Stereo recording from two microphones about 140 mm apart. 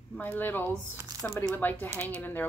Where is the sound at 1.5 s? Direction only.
15° left (ahead or behind).